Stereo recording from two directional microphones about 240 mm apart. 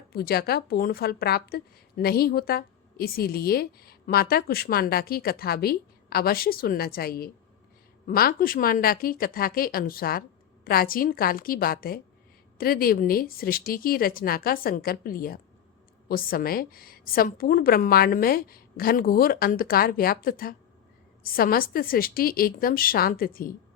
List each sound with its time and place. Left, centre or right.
0.1 s a woman's voice: left